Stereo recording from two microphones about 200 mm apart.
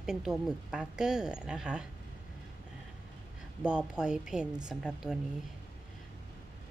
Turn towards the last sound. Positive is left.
turn(degrees=-5)  # may be behind; listen again after turning